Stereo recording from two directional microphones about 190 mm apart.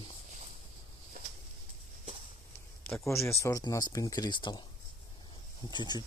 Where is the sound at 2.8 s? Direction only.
10° left (ahead or behind).